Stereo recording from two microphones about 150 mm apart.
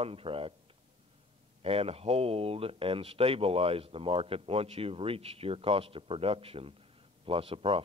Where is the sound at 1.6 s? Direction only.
40° right (ahead or behind).